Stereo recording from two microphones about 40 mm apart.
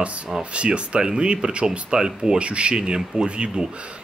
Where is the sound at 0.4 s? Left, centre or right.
Right.